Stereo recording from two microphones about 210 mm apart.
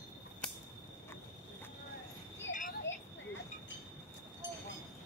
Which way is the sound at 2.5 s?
40° left (ahead or behind).